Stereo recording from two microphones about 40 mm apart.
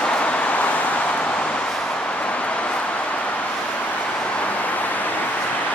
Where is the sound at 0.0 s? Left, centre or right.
Left.